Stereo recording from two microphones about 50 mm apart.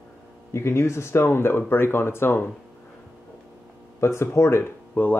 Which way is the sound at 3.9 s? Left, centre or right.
Left.